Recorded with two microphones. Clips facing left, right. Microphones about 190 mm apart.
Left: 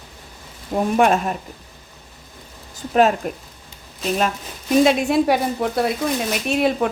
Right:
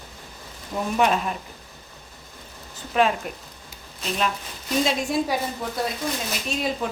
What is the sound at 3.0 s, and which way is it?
Speech, 45° left (ahead or behind).